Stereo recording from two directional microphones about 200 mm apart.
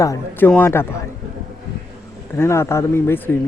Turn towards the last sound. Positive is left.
turn(degrees=10)  # may be behind; listen again after turning